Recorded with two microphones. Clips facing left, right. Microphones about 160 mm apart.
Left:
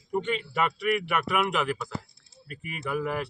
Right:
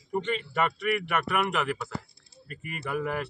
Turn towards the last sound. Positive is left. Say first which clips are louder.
# left 1 dB
turn(degrees=0)  # may be behind; listen again after turning